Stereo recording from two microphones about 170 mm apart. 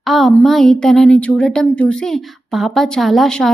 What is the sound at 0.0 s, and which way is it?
A woman's voice, centre (ahead or behind).